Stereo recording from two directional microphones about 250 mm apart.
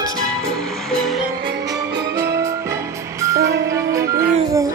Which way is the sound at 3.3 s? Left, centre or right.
Right.